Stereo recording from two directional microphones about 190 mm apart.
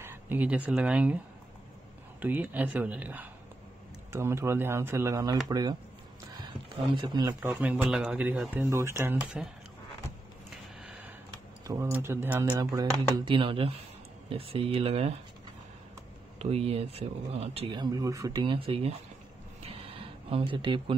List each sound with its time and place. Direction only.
0.0 s speech: 10° right (ahead or behind)
2.2 s a man's voice: 10° right (ahead or behind)
6.9 s a man's voice: 25° right (ahead or behind); by 9.5 s 5° right (ahead or behind)
11.6 s a man's voice: 15° right (ahead or behind); by 15.1 s 30° right (ahead or behind)
16.3 s speech: 35° right (ahead or behind)
20.2 s speech: 30° right (ahead or behind)